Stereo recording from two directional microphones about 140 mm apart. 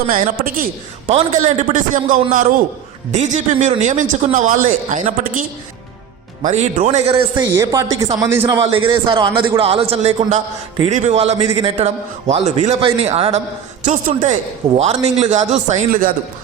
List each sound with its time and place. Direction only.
0.1 s a man's voice: 90° right
1.1 s speech: 55° right (ahead or behind)
3.1 s a woman's voice: 55° right (ahead or behind)
6.4 s speech: 55° right (ahead or behind)
7.4 s a man's voice: 25° right (ahead or behind)
8.6 s a man's voice: 40° right (ahead or behind); by 16.0 s 55° right (ahead or behind)